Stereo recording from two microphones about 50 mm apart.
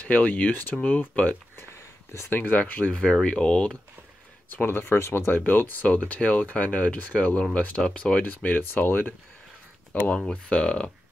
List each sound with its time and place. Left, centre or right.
0.0 s speech: left
1.6 s a sound: left
2.2 s speech: left
2.9 s speech: left
4.6 s speech: left
4.9 s speech: left
5.9 s speech: left
8.5 s speech: left
10.1 s speech: centre